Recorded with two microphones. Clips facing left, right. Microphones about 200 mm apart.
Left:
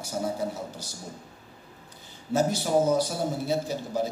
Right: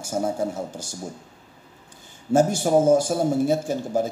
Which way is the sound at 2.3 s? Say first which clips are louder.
Right 6 dB; 50° right (ahead or behind).